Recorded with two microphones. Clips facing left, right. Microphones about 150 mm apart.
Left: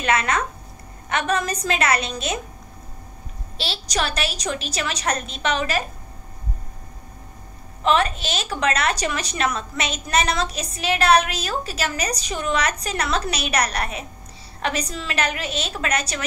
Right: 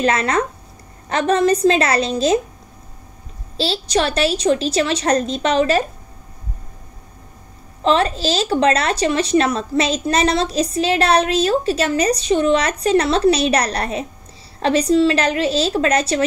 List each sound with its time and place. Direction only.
0.0 s a woman's voice: 30° right (ahead or behind)
3.5 s a woman's voice: 30° right (ahead or behind)
7.8 s a woman's voice: 30° right (ahead or behind)